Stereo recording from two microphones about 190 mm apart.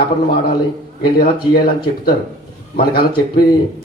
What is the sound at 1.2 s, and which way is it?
A man's voice, 50° left (ahead or behind).